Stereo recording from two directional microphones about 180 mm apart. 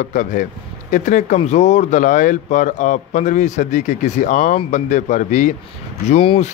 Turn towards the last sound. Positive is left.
turn(degrees=35)  # may be behind; listen again after turning